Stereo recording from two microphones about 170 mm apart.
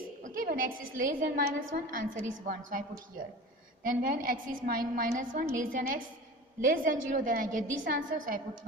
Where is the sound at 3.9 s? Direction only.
55° right (ahead or behind).